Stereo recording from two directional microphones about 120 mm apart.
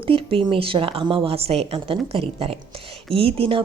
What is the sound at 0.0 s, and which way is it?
Speech, 50° right (ahead or behind).